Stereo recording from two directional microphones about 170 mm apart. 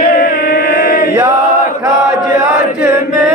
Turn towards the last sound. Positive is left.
turn(degrees=-15)  # may be behind; listen again after turning